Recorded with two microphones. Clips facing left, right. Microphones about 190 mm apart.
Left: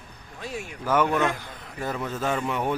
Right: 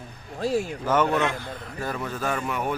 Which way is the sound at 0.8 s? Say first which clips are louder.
Left 1 dB; 10° left (ahead or behind).